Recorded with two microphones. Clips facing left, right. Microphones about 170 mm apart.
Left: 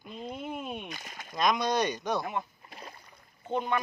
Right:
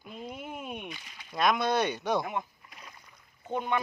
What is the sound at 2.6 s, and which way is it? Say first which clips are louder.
Splash: left 5 dB; 30° left (ahead or behind).